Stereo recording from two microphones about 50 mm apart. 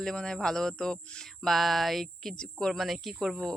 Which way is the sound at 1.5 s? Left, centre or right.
Centre.